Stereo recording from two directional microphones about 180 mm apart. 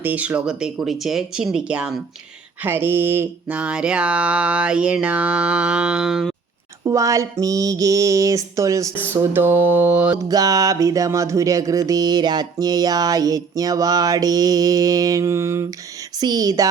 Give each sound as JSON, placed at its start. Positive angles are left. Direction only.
{"t": 0.0, "sound": "speech", "side_deg": -10}
{"t": 2.6, "sound": "mantra", "side_deg": -10}
{"t": 6.8, "sound": "mantra", "side_deg": -15}
{"t": 10.2, "sound": "speech", "side_deg": -20}